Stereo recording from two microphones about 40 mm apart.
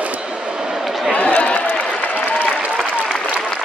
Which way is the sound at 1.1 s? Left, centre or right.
Left.